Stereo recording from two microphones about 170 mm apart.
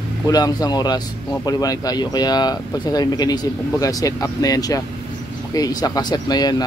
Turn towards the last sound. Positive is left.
turn(degrees=25)  # may be behind; listen again after turning